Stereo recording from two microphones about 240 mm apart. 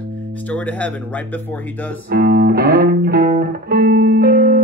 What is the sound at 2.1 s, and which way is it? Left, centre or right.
Music, right.